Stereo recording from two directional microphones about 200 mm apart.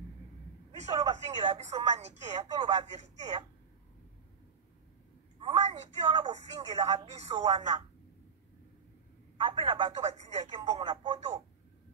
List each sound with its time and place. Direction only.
0.7 s a sound: 35° right (ahead or behind)
1.1 s a woman's voice: 35° right (ahead or behind)
5.4 s a woman's voice: 30° right (ahead or behind)
9.4 s a woman's voice: 25° right (ahead or behind)
11.1 s speech: 35° right (ahead or behind)